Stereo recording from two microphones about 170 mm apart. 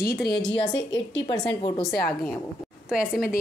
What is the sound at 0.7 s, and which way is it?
Speech, 90° left.